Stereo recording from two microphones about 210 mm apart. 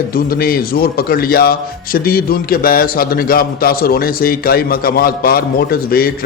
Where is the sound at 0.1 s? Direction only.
45° left (ahead or behind).